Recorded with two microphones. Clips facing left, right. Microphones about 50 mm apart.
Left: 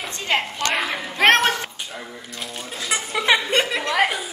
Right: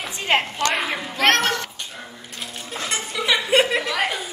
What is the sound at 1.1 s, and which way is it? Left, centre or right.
Speech, left.